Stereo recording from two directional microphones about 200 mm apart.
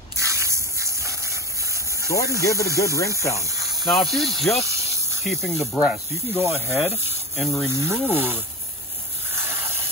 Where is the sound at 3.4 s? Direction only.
15° right (ahead or behind).